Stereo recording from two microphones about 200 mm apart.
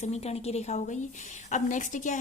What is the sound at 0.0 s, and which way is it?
A woman's voice, 30° left (ahead or behind).